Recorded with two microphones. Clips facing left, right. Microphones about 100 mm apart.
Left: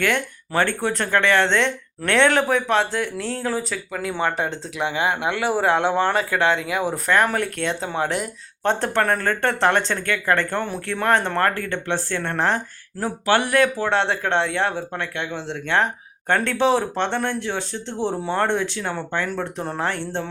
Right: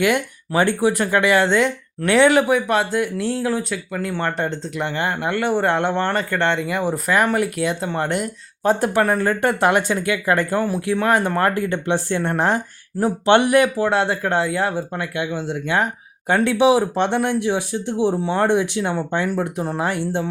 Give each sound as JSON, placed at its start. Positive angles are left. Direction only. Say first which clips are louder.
{"t": 0.0, "sound": "speech", "louder": "right 3 dB", "side_deg": -15}
{"t": 13.7, "sound": "speech", "louder": "right 2 dB", "side_deg": -5}